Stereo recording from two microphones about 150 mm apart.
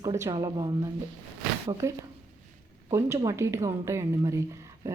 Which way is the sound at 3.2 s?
20° right (ahead or behind).